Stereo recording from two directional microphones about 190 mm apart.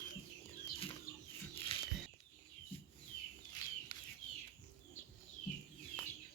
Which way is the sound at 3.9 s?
20° left (ahead or behind).